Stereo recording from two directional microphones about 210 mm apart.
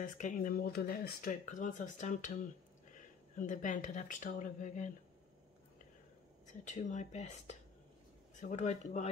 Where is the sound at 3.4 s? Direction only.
35° left (ahead or behind).